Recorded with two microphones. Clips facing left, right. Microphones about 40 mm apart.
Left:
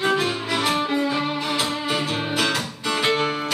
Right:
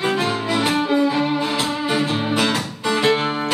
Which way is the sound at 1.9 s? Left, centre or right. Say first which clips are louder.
Right 4 dB; right.